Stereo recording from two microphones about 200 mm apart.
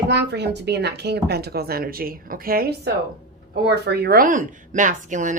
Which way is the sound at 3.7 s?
55° right (ahead or behind).